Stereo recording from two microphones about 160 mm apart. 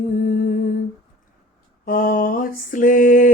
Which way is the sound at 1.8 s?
60° left (ahead or behind).